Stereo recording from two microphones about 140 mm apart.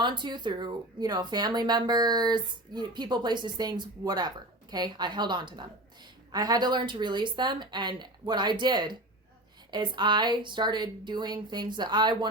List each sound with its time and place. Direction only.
0.0 s speech: 35° right (ahead or behind)